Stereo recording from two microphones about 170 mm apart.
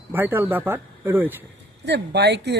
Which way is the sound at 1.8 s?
85° right.